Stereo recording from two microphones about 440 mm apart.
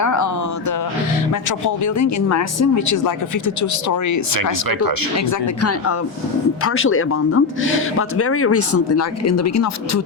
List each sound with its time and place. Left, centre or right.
0.0 s a sound: left
1.3 s speech: left
6.7 s speech: left